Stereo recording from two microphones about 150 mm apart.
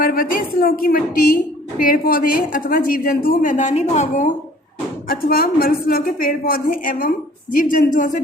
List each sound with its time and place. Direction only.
0.0 s a woman's voice: 70° left (ahead or behind); by 4.4 s 55° left (ahead or behind)
5.0 s a woman's voice: 80° left; by 8.2 s 60° left (ahead or behind)